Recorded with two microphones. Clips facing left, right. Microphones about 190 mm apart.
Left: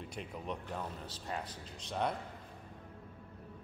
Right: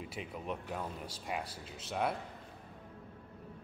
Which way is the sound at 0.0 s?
5° right (ahead or behind).